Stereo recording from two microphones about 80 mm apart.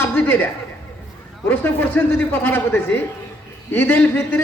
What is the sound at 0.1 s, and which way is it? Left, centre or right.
Chuckle, centre.